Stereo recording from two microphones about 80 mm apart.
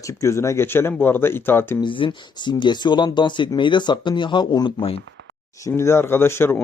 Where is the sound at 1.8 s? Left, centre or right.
Left.